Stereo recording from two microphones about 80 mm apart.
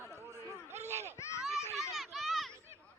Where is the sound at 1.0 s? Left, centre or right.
Left.